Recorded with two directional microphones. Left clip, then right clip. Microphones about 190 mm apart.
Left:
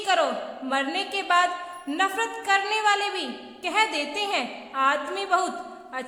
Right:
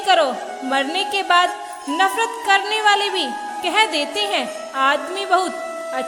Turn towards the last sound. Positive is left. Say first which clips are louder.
# right 6 dB
turn(degrees=-25)  # may be behind; listen again after turning